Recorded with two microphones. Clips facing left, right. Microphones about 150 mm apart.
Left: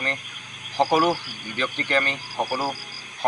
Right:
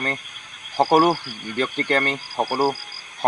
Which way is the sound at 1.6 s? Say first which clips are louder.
Right 3 dB; 50° right (ahead or behind).